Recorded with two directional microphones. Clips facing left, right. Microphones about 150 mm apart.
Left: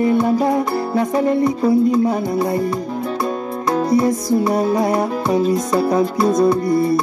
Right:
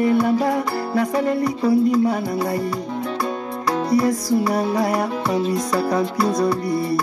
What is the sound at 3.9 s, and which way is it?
Music, 20° left (ahead or behind).